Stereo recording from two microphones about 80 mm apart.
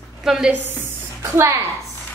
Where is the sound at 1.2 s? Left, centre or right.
Right.